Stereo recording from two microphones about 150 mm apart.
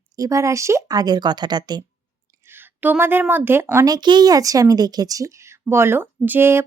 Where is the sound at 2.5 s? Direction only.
15° right (ahead or behind).